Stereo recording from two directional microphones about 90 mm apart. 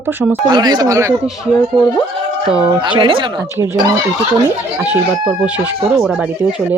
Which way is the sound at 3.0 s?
75° right (ahead or behind).